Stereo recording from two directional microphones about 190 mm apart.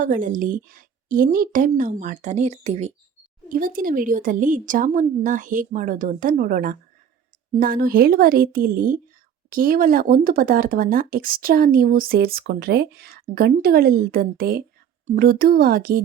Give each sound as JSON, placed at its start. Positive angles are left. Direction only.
{"t": 0.0, "sound": "speech", "side_deg": -45}
{"t": 3.5, "sound": "speech", "side_deg": -45}